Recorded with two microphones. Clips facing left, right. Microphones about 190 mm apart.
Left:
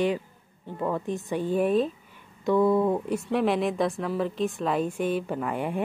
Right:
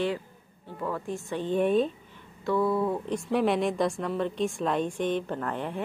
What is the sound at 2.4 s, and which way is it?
Speech, 20° left (ahead or behind).